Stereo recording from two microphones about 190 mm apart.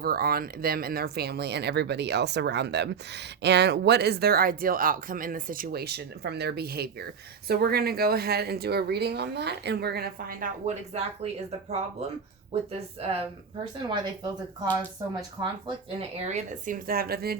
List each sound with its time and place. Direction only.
0.0 s speech: 50° right (ahead or behind)
10.7 s speech: 35° right (ahead or behind)
12.7 s speech: 30° right (ahead or behind)
16.3 s speech: 40° right (ahead or behind)